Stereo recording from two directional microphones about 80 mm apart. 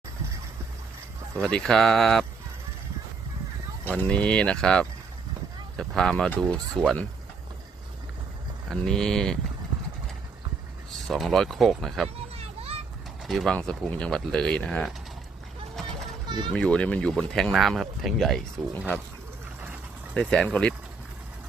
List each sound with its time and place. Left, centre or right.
1.4 s speech: centre
3.8 s speech: centre
8.7 s speech: centre
11.1 s speech: centre
13.2 s speech: centre
13.6 s speech: centre
15.7 s a sound: centre
16.2 s a sound: right
16.5 s speech: centre
20.1 s speech: centre